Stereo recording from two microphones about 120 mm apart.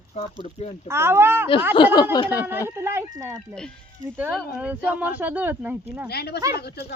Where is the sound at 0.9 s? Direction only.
20° right (ahead or behind).